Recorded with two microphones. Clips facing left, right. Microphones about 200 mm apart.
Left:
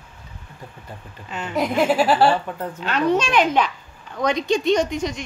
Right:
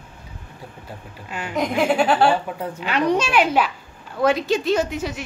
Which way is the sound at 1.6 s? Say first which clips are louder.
Left 1 dB; 5° left (ahead or behind).